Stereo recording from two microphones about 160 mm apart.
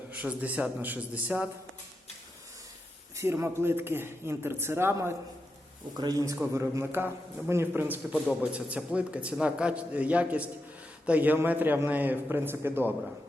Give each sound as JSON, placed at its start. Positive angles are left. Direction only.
{"t": 0.1, "sound": "a man's voice", "side_deg": -10}
{"t": 3.2, "sound": "a man's voice", "side_deg": -15}